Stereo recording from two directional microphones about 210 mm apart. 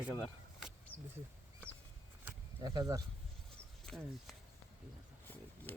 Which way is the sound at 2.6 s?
15° right (ahead or behind).